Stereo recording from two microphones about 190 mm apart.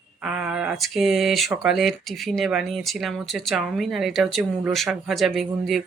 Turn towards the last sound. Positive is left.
turn(degrees=0)  # may be behind; listen again after turning